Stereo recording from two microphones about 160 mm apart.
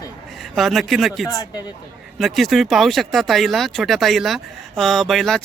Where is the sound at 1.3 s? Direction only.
25° left (ahead or behind).